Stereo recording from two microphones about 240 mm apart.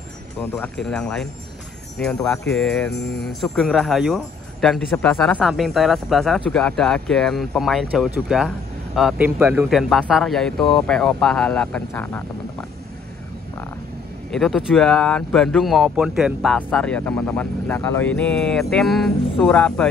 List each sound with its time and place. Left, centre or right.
0.4 s speech: centre
2.9 s music: left
3.5 s speech: centre
14.3 s speech: centre